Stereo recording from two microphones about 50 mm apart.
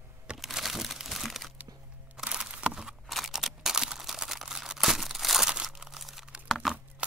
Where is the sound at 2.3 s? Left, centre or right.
Right.